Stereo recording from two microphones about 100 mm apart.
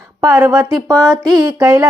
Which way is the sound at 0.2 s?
30° right (ahead or behind).